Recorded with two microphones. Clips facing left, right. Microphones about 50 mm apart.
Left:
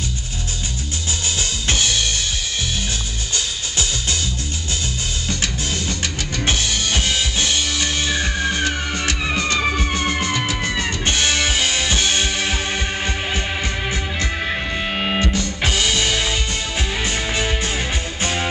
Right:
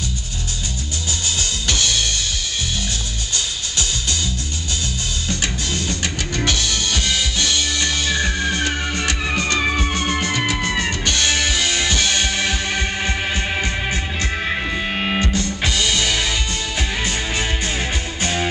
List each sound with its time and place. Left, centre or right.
6.4 s music: left
9.0 s music: right
11.2 s music: left
13.0 s heart sounds: left
15.0 s music: centre
15.3 s music: left